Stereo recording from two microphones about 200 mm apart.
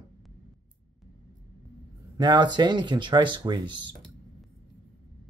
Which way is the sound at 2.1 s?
20° right (ahead or behind).